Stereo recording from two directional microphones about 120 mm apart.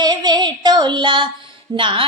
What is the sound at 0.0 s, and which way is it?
Child singing, 35° right (ahead or behind).